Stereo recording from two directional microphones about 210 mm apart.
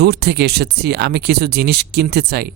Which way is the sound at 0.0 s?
50° right (ahead or behind).